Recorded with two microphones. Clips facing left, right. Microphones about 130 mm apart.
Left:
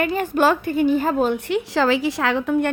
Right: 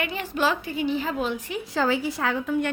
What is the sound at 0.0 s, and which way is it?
A woman's voice, 45° left (ahead or behind).